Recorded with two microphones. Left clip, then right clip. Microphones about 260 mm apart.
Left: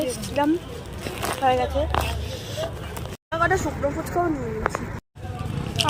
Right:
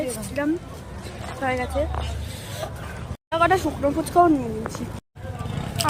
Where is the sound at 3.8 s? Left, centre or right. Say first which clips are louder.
Right 3 dB; centre.